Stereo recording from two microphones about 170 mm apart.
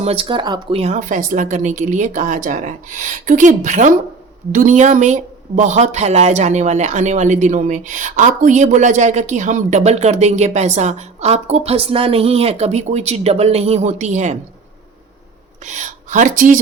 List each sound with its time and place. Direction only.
0.0 s speech: 35° right (ahead or behind)
0.8 s speech: 45° right (ahead or behind)
15.6 s speech: 45° right (ahead or behind)